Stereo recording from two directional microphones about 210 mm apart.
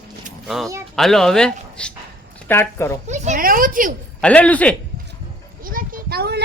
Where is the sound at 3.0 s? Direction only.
35° right (ahead or behind).